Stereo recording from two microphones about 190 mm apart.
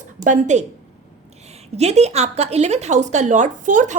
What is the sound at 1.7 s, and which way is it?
A woman's voice, 35° right (ahead or behind).